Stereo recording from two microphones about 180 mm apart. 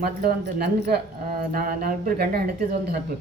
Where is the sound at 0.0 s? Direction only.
55° right (ahead or behind).